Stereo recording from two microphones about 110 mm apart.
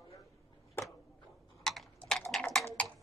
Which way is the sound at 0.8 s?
20° left (ahead or behind).